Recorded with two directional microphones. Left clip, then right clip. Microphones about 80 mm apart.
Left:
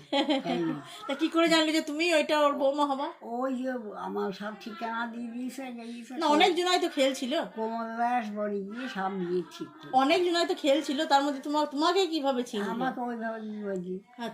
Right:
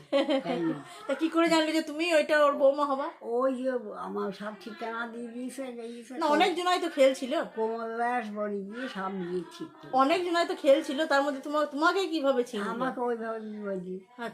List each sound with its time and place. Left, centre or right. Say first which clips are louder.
0.1 s a woman's voice: right 1 dB; centre
3.4 s a woman's voice: right 2 dB; right
6.1 s a woman's voice: left 2 dB; centre
7.6 s a woman's voice: even; right
9.9 s a woman's voice: left 1 dB; centre
12.6 s a woman's voice: right 1 dB; right